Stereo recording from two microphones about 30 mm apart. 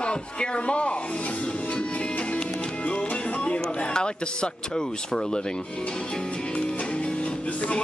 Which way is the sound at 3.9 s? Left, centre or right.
Left.